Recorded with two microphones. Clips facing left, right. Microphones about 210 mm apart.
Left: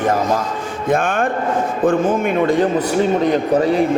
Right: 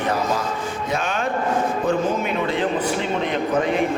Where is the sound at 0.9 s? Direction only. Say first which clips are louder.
Left 8 dB; 50° left (ahead or behind).